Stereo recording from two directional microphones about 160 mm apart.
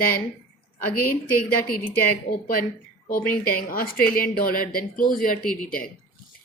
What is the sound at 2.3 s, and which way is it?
A woman's voice, 65° left (ahead or behind).